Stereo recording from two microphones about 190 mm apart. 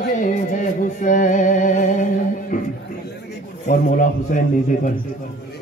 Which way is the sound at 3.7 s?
45° left (ahead or behind).